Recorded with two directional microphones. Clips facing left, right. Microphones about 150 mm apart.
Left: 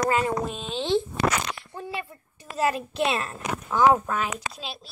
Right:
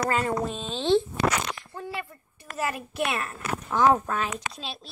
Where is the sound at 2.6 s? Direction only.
25° left (ahead or behind).